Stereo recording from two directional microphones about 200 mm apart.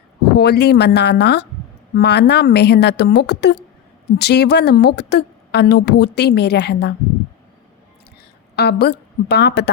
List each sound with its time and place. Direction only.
0.3 s speech: 55° left (ahead or behind)
8.5 s speech: 55° left (ahead or behind)